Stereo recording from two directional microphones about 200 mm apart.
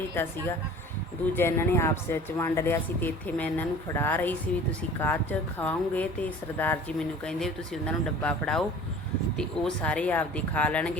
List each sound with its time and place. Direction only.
0.1 s speech: 10° left (ahead or behind)